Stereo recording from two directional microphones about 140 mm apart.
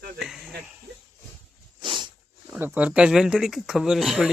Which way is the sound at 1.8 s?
35° right (ahead or behind).